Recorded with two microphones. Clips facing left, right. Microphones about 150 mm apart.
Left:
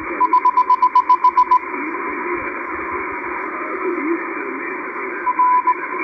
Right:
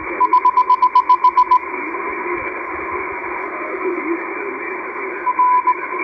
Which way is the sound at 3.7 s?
25° right (ahead or behind).